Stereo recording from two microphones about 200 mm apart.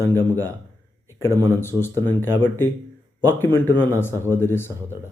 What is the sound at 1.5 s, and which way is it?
Speech, 10° left (ahead or behind).